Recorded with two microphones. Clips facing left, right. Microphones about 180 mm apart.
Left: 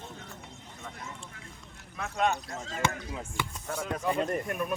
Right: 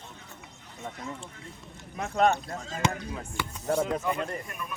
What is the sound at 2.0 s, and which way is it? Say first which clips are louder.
Speech: right 5 dB; 40° right (ahead or behind).